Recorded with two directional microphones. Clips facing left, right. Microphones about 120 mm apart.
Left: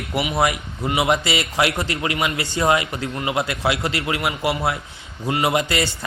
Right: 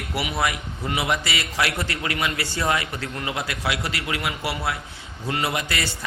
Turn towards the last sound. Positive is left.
turn(degrees=25)  # may be behind; listen again after turning